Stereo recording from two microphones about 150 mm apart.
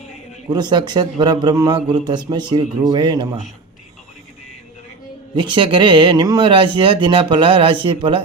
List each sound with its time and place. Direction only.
0.5 s a man's voice: 30° right (ahead or behind)
5.3 s speech: 30° right (ahead or behind)